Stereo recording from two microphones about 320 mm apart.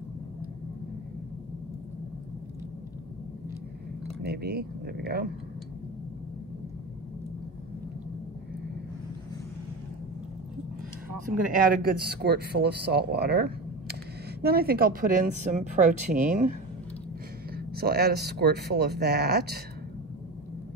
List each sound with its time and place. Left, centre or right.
4.2 s a man's voice: right
11.7 s a man's voice: right
17.6 s speech: right